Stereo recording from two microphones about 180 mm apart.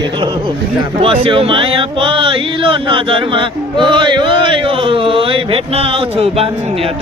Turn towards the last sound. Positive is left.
turn(degrees=-35)  # may be behind; listen again after turning